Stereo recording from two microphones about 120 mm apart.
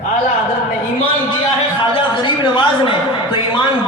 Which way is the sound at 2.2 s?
45° left (ahead or behind).